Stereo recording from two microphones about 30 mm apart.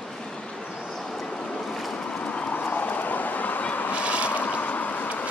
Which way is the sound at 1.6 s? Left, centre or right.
Centre.